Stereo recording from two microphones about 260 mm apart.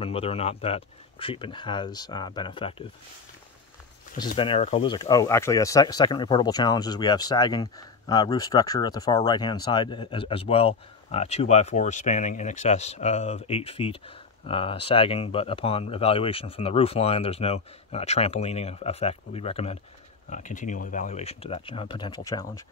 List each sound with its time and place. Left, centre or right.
0.0 s speech: left
4.4 s speech: left